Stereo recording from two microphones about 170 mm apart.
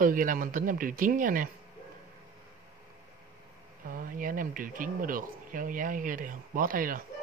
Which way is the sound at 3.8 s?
55° right (ahead or behind).